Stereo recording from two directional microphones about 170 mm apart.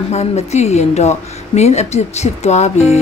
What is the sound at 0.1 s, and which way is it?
A woman's voice, 40° left (ahead or behind).